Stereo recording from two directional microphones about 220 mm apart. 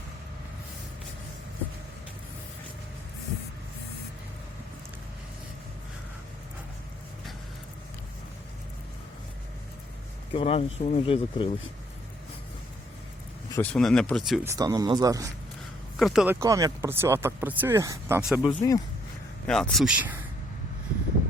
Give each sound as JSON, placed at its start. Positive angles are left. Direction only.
{"t": 10.3, "sound": "speech", "side_deg": 25}
{"t": 13.5, "sound": "speech", "side_deg": 5}
{"t": 14.4, "sound": "speech", "side_deg": -15}
{"t": 16.0, "sound": "speech", "side_deg": 0}
{"t": 18.4, "sound": "speech", "side_deg": 15}
{"t": 19.5, "sound": "speech", "side_deg": 5}